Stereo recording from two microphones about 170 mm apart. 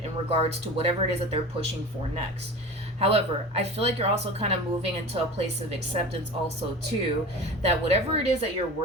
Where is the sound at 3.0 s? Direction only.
35° right (ahead or behind).